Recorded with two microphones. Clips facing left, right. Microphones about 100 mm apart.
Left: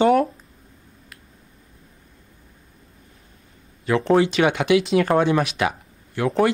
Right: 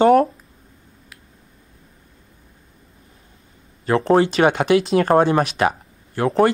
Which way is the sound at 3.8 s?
40° right (ahead or behind).